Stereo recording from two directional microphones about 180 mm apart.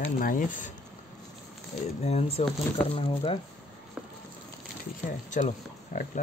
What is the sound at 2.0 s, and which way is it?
Speech, 35° left (ahead or behind).